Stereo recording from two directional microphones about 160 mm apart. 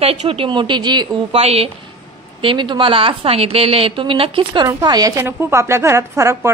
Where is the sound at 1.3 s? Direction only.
40° right (ahead or behind).